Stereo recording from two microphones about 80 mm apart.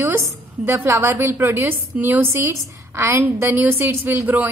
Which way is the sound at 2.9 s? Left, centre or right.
Right.